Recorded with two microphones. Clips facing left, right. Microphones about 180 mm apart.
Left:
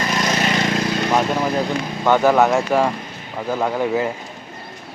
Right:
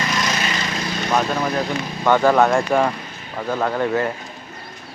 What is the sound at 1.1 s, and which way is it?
Speech, 10° left (ahead or behind).